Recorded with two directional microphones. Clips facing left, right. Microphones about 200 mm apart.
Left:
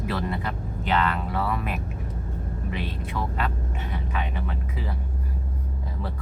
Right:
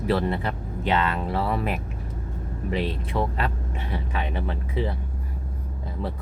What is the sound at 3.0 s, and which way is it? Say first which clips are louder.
Speech: right 3 dB; 30° right (ahead or behind).